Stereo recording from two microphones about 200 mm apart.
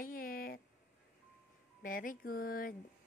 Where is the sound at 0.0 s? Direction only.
45° left (ahead or behind).